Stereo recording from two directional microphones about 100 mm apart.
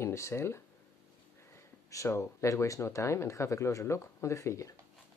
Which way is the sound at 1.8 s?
30° left (ahead or behind).